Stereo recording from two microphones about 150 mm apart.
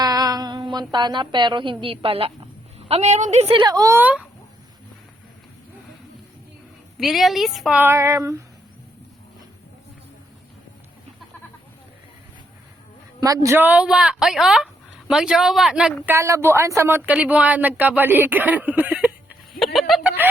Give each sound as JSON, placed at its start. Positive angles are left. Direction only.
{"t": 0.0, "sound": "a woman's voice", "side_deg": -25}
{"t": 2.9, "sound": "speech", "side_deg": -50}
{"t": 3.6, "sound": "speech", "side_deg": -25}
{"t": 7.0, "sound": "speech", "side_deg": 0}
{"t": 7.8, "sound": "a sound", "side_deg": -15}
{"t": 13.1, "sound": "speech", "side_deg": -25}
{"t": 16.0, "sound": "speech", "side_deg": -20}
{"t": 19.5, "sound": "a sound", "side_deg": 0}